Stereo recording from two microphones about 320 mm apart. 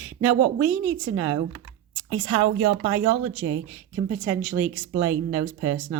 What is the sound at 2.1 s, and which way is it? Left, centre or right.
Speech, centre.